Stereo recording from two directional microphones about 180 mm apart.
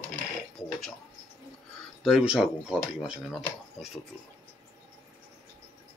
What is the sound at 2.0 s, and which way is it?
Speech, 5° right (ahead or behind).